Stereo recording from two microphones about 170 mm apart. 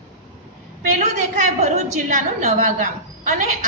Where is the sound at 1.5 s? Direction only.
45° right (ahead or behind).